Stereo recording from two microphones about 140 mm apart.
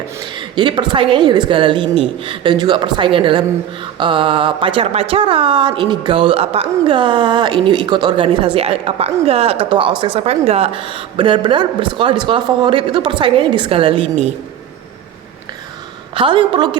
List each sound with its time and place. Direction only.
0.3 s speech: 35° right (ahead or behind)
16.1 s speech: 40° right (ahead or behind)